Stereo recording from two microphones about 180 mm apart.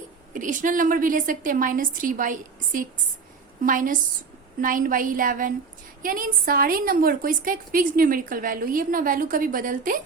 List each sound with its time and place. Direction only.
0.3 s a woman's voice: 45° right (ahead or behind)